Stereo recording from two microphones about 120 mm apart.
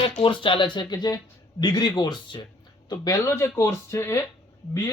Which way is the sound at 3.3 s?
20° left (ahead or behind).